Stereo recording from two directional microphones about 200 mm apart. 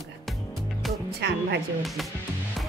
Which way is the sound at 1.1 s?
55° right (ahead or behind).